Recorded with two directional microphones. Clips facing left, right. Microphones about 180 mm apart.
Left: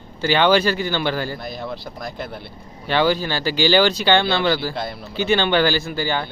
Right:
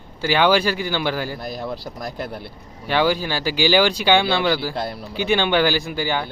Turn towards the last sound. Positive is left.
turn(degrees=-10)  # may be behind; listen again after turning